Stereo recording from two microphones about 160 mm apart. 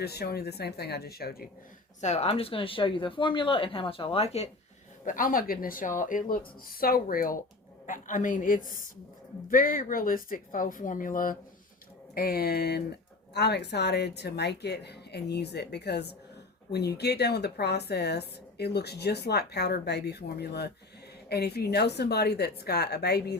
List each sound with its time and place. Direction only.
0.0 s speech: 90° left; by 1.5 s 75° left (ahead or behind)
2.0 s speech: 45° left (ahead or behind)
5.0 s a woman's voice: 60° left (ahead or behind); by 23.4 s 90° left